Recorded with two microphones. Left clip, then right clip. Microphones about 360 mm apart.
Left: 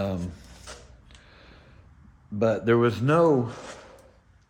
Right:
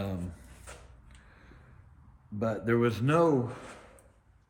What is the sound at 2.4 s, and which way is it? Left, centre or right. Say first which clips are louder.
Speech: left 7 dB; centre.